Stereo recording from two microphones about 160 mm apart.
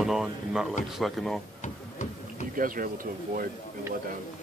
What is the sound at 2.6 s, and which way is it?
Speech, 60° right (ahead or behind).